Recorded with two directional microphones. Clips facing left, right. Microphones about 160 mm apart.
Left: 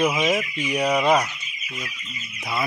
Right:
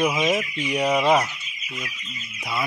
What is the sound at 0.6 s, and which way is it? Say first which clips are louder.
Fowl: even; 20° right (ahead or behind).